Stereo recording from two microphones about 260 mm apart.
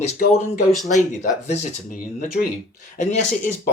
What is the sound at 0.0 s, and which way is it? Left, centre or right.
Speech, left.